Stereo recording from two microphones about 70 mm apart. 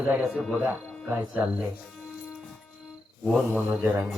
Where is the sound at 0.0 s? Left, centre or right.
Right.